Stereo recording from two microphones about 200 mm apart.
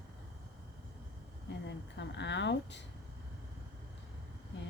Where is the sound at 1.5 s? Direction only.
60° left (ahead or behind).